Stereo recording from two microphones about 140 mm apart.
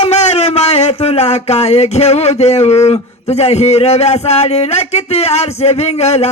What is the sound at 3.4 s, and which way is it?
Speech, 50° left (ahead or behind).